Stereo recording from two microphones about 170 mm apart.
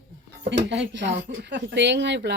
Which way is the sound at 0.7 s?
90° right.